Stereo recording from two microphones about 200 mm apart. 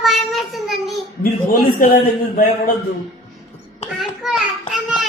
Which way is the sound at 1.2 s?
45° left (ahead or behind).